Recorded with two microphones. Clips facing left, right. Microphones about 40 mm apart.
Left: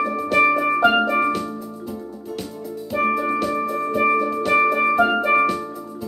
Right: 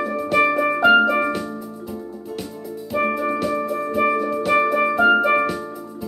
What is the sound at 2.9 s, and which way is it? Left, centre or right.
Music, centre.